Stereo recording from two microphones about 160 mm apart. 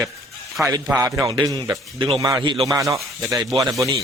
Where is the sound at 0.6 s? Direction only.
5° right (ahead or behind).